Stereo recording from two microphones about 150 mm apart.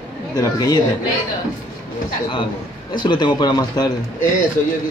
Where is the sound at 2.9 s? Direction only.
30° left (ahead or behind).